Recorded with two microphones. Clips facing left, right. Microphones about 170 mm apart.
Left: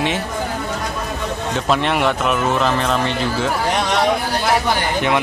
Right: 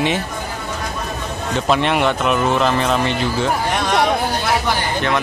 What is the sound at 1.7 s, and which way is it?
Speech, centre (ahead or behind).